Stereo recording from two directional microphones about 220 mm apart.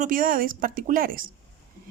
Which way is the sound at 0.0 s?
40° right (ahead or behind).